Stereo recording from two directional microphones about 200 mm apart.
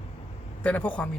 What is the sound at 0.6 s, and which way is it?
Speech, 5° left (ahead or behind).